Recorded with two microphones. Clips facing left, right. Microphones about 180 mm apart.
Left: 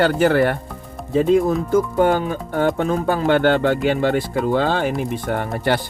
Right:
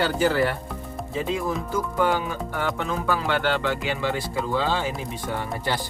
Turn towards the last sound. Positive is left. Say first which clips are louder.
# left 7 dB
turn(degrees=60)  # may be behind; listen again after turning